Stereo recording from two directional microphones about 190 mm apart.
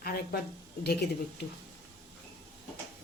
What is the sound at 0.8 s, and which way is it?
Speech, 60° left (ahead or behind).